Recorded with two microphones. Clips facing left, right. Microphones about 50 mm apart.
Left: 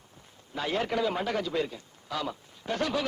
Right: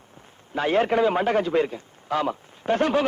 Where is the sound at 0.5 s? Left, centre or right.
Right.